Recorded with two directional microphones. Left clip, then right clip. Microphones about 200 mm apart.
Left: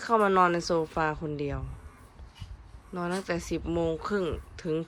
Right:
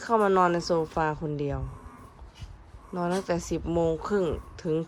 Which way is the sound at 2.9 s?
15° right (ahead or behind).